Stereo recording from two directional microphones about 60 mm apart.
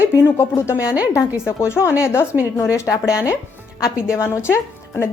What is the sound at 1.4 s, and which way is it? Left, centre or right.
Speech, left.